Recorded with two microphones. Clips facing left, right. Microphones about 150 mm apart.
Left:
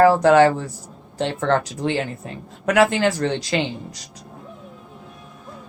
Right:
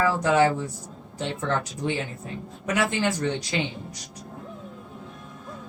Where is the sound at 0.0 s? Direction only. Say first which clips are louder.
Left 8 dB; 80° left.